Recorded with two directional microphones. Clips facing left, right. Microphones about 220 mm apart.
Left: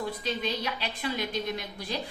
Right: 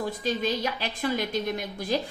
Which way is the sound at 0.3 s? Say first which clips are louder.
Right 6 dB; 45° right (ahead or behind).